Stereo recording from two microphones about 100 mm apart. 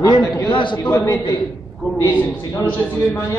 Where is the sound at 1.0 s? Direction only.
35° left (ahead or behind).